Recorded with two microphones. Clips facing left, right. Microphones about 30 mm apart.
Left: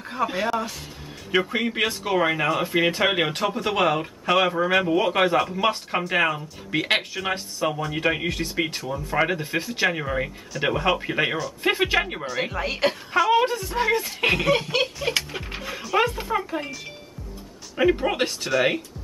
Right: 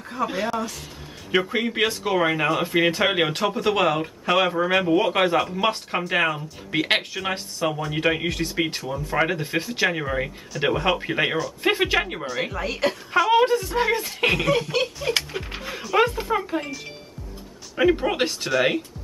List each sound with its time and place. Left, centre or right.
0.2 s speech: centre
12.6 s speech: centre
13.1 s speech: centre
14.5 s speech: centre
15.3 s speech: centre